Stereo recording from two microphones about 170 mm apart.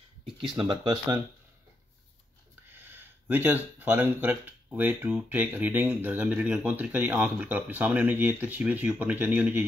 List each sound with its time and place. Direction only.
0.4 s speech: 25° right (ahead or behind)
2.7 s speech: 10° right (ahead or behind)